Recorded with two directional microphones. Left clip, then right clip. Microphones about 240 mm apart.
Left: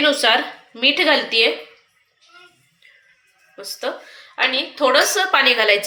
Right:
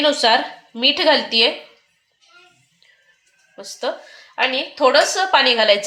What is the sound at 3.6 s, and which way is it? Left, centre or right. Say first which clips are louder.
A woman's voice: right 1 dB; right.